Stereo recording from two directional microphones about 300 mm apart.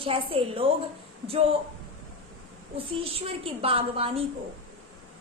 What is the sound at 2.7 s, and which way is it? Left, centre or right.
A woman's voice, centre.